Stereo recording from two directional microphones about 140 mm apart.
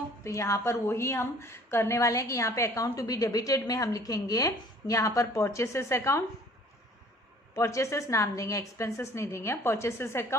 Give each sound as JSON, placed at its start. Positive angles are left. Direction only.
{"t": 0.3, "sound": "a woman's voice", "side_deg": 20}
{"t": 7.5, "sound": "a woman's voice", "side_deg": 20}